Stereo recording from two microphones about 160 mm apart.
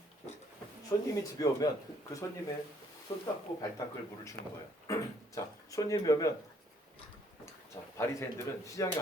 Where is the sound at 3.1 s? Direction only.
20° left (ahead or behind).